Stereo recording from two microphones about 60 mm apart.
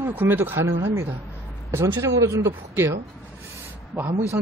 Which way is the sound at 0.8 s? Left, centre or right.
Right.